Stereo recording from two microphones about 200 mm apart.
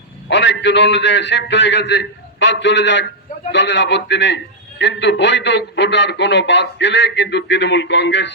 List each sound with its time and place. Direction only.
0.3 s a man's voice: 60° left (ahead or behind)